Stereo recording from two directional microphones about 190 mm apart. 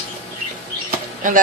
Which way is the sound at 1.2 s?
45° right (ahead or behind).